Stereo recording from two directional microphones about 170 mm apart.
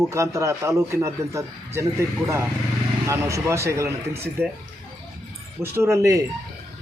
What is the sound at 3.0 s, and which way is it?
A man's voice, 15° right (ahead or behind).